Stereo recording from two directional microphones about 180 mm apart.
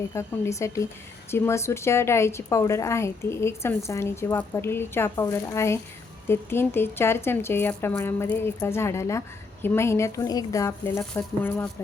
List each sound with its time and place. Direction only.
0.1 s speech: 15° left (ahead or behind)